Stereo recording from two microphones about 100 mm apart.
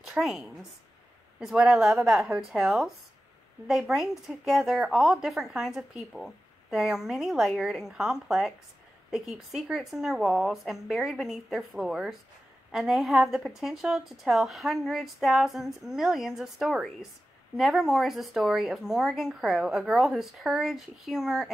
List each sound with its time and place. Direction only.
0.0 s a woman's voice: centre (ahead or behind)